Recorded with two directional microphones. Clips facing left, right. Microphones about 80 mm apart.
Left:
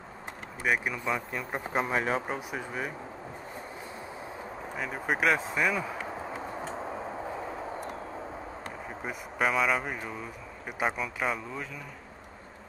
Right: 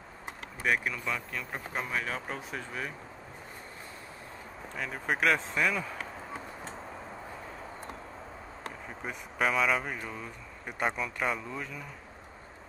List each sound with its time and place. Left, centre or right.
0.7 s speech: centre; by 2.2 s left
2.2 s speech: centre
4.7 s speech: centre
8.6 s speech: centre